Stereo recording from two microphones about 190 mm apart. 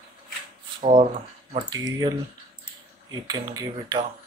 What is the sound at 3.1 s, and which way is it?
Speech, 20° right (ahead or behind).